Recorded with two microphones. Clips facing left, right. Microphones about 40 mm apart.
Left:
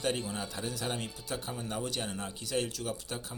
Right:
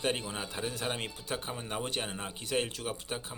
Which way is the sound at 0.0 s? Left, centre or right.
Right.